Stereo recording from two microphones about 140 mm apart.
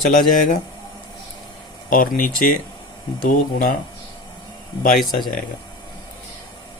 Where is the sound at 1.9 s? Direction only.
75° left (ahead or behind).